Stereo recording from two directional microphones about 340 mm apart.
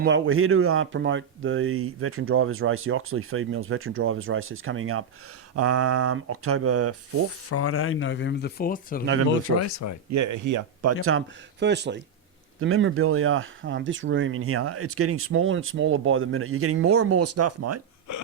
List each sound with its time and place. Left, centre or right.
0.0 s speech: right
7.5 s speech: left
9.6 s speech: left
10.1 s speech: right
11.6 s speech: right